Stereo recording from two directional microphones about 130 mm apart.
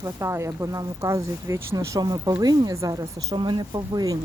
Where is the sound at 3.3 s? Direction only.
35° right (ahead or behind).